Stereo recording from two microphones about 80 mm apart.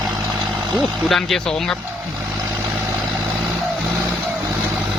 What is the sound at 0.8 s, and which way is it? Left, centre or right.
Speech, centre.